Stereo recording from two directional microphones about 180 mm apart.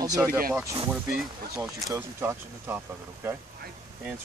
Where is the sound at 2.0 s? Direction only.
15° right (ahead or behind).